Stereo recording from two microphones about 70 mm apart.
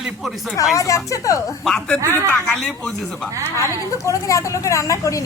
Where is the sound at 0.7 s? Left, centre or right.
Left.